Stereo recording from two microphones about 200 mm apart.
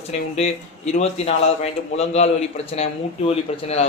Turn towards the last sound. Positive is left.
turn(degrees=30)  # may be behind; listen again after turning